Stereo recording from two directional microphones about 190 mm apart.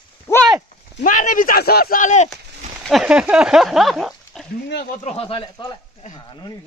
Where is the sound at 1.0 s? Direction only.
40° left (ahead or behind).